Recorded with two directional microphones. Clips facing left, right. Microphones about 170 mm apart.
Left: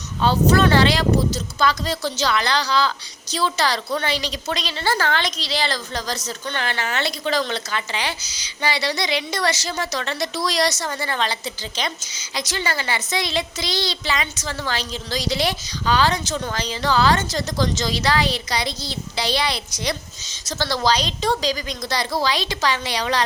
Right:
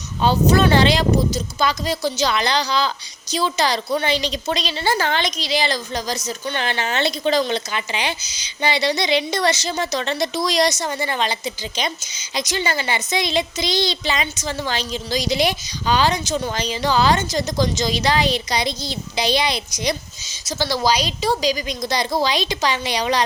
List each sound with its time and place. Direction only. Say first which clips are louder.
0.2 s speech: right 1 dB; 15° right (ahead or behind)